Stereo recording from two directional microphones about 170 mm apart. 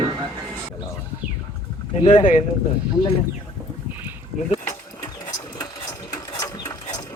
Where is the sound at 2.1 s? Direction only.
40° left (ahead or behind).